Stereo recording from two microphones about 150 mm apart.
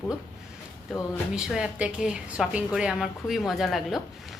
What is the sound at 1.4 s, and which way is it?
A woman's voice, 5° right (ahead or behind).